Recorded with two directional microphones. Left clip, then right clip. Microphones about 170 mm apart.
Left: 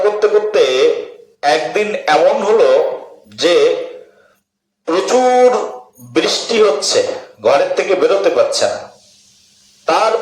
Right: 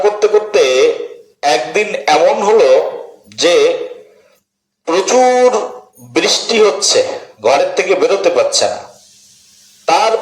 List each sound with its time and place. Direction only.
0.0 s music: 25° right (ahead or behind)
1.4 s a man's voice: 25° right (ahead or behind)
4.9 s a man's voice: 25° right (ahead or behind)
9.8 s a man's voice: 25° right (ahead or behind)